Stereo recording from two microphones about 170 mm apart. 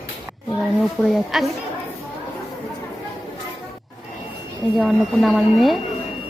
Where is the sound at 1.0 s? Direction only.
Centre (ahead or behind).